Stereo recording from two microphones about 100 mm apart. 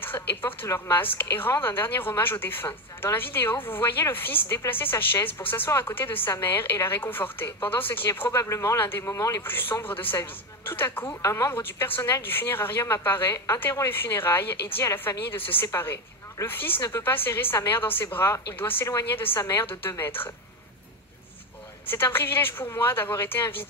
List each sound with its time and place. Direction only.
0.0 s a sound: 20° left (ahead or behind)
0.7 s a woman's voice: 25° left (ahead or behind)
21.8 s a woman's voice: 20° left (ahead or behind)